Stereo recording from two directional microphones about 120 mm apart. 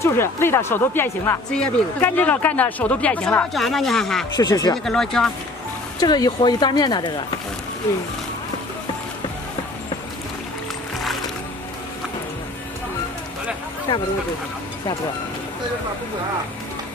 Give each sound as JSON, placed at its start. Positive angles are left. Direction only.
{"t": 0.0, "sound": "speech", "side_deg": 20}
{"t": 1.5, "sound": "speech", "side_deg": 5}
{"t": 4.4, "sound": "speech", "side_deg": 30}
{"t": 4.8, "sound": "speech", "side_deg": 5}
{"t": 5.9, "sound": "speech", "side_deg": 35}